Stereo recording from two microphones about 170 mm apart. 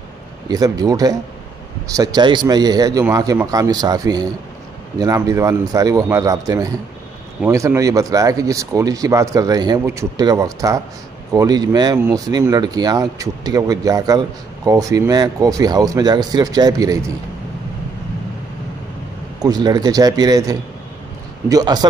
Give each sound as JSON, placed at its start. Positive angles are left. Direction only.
{"t": 0.5, "sound": "speech", "side_deg": -20}
{"t": 19.4, "sound": "speech", "side_deg": -25}